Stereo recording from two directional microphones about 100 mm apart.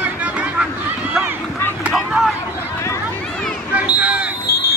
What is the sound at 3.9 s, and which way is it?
Basketball bounce, 15° right (ahead or behind).